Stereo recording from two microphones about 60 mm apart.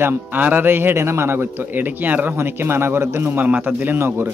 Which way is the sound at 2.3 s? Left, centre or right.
Right.